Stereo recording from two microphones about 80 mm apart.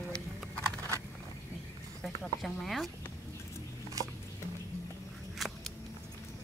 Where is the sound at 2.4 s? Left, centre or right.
Centre.